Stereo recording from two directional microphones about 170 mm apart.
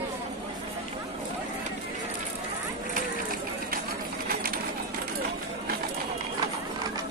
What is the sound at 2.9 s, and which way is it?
Run, 55° right (ahead or behind).